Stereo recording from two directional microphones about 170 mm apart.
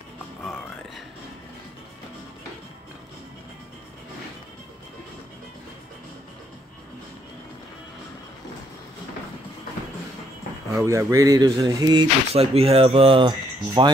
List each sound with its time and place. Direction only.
0.4 s music: centre (ahead or behind)
10.8 s speech: 15° right (ahead or behind)